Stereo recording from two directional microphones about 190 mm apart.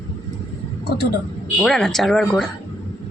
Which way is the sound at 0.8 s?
55° left (ahead or behind).